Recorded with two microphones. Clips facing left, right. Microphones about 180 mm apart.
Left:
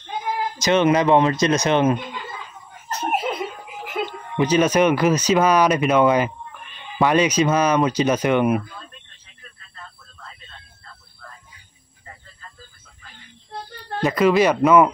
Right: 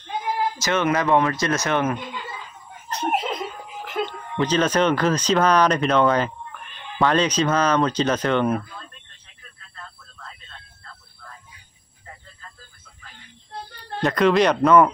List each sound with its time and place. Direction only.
0.6 s speech: 20° left (ahead or behind)
3.0 s speech: 5° left (ahead or behind)
14.0 s speech: 5° left (ahead or behind)